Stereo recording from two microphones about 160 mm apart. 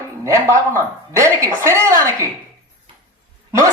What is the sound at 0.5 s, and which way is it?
Speech, 20° right (ahead or behind).